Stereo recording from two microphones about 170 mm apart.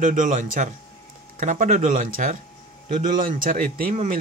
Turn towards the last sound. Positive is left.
turn(degrees=-50)  # may be behind; listen again after turning